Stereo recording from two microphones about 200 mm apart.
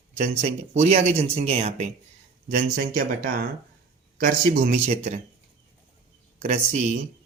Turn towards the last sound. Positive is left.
turn(degrees=-35)  # may be behind; listen again after turning